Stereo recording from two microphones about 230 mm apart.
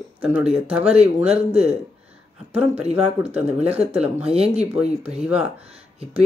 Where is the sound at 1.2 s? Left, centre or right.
Right.